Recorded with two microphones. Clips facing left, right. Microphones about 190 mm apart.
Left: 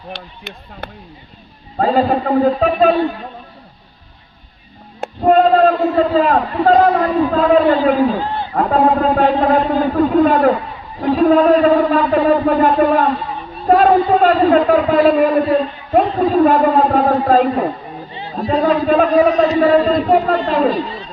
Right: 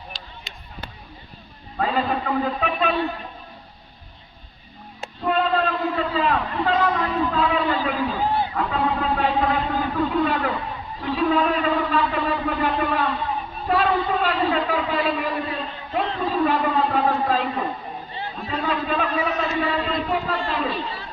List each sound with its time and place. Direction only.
0.1 s speech: 60° left (ahead or behind)
1.8 s a man's voice: 40° left (ahead or behind)
4.9 s bleat: 45° left (ahead or behind)
5.9 s a man's voice: 45° left (ahead or behind)